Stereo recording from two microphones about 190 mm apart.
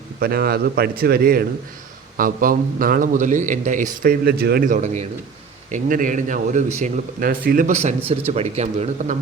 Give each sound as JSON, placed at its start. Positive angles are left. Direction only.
{"t": 0.2, "sound": "a man's voice", "side_deg": -50}